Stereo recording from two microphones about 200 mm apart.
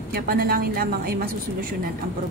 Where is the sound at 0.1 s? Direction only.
45° right (ahead or behind).